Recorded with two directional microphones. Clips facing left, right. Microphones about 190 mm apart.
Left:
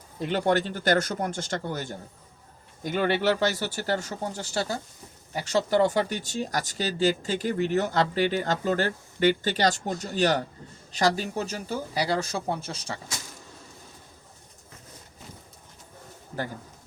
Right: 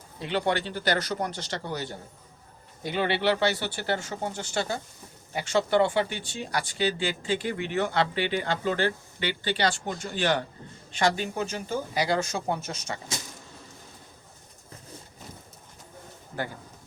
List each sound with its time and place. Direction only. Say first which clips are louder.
0.2 s speech: left 3 dB; 45° left (ahead or behind)